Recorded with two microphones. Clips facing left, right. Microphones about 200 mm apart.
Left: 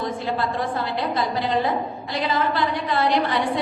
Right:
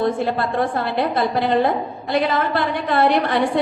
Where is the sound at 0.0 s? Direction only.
55° right (ahead or behind).